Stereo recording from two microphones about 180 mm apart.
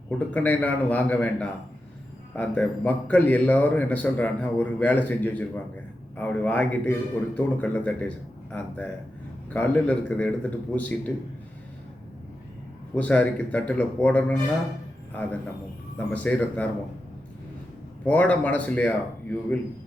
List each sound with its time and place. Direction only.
0.3 s a man's voice: 10° left (ahead or behind)
13.0 s a man's voice: 5° left (ahead or behind)
18.0 s a man's voice: 10° left (ahead or behind)